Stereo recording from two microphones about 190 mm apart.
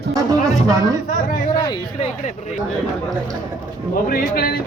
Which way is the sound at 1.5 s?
20° left (ahead or behind).